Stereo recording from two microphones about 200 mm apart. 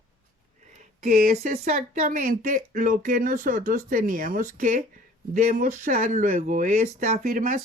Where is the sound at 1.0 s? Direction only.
40° right (ahead or behind).